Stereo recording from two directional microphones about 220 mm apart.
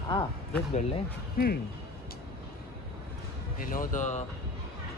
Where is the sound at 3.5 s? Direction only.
40° left (ahead or behind).